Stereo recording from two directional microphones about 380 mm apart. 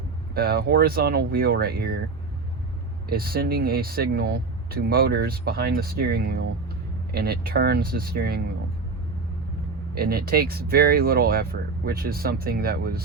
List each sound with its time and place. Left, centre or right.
0.3 s speech: right
3.1 s speech: right
9.9 s speech: right